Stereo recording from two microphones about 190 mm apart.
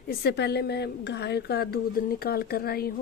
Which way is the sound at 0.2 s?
65° left (ahead or behind).